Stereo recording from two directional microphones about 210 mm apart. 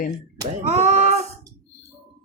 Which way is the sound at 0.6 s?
35° right (ahead or behind).